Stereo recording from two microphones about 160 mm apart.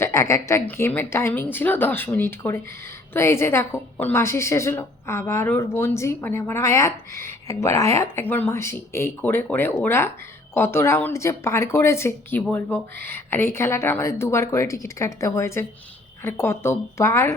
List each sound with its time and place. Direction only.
0.0 s a woman's voice: 15° left (ahead or behind)